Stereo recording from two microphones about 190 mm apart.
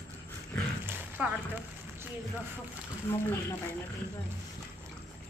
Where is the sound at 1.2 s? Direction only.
5° right (ahead or behind).